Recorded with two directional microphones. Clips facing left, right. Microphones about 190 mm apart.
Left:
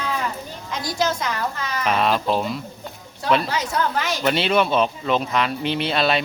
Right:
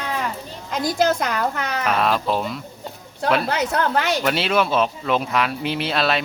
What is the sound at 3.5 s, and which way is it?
Speech, 60° right (ahead or behind).